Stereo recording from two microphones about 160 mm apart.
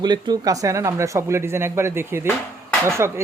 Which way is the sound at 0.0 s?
25° right (ahead or behind).